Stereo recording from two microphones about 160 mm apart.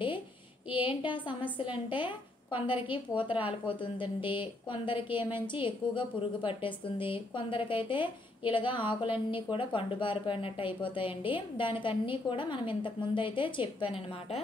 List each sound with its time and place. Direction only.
0.7 s a woman's voice: 30° left (ahead or behind)